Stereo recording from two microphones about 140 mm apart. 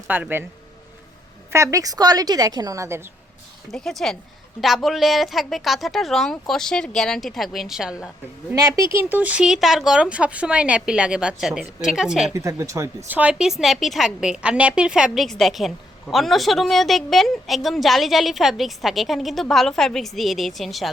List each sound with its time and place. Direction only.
0.1 s speech: 15° right (ahead or behind)
1.5 s a woman's voice: 20° right (ahead or behind)
3.7 s a woman's voice: 5° left (ahead or behind)
8.5 s speech: 25° right (ahead or behind); by 12.3 s 5° right (ahead or behind)
12.3 s a woman's voice: 20° right (ahead or behind)
13.1 s a woman's voice: 10° right (ahead or behind)